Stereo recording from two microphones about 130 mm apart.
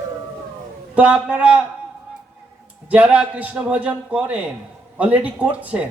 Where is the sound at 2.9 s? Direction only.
10° right (ahead or behind).